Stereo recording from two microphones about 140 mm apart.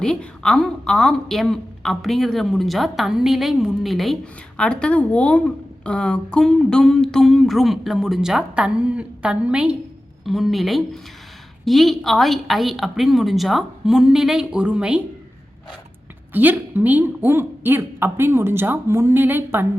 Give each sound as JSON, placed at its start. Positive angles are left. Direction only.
{"t": 0.0, "sound": "a woman's voice", "side_deg": 5}
{"t": 16.3, "sound": "a woman's voice", "side_deg": -10}